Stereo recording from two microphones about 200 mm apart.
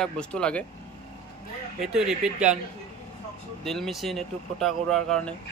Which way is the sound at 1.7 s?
5° right (ahead or behind).